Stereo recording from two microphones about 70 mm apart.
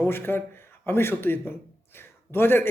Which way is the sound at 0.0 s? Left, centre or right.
Left.